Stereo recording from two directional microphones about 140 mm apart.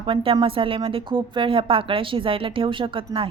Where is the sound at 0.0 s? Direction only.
40° right (ahead or behind).